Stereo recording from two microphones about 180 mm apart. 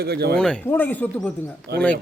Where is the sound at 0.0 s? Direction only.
65° right (ahead or behind).